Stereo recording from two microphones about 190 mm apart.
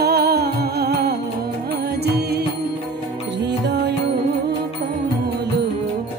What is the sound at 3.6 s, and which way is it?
Music, 65° right (ahead or behind).